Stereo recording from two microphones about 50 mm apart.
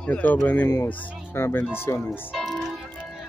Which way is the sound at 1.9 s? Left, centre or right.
Left.